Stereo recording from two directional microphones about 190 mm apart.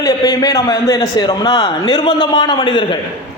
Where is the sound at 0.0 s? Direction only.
20° left (ahead or behind).